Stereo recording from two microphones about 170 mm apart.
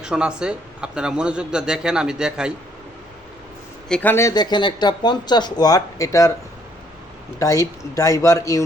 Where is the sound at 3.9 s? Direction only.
10° left (ahead or behind).